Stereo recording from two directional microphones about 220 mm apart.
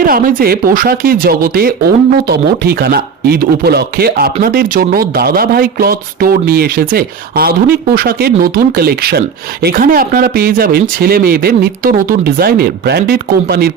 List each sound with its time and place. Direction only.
0.0 s speech: 40° right (ahead or behind)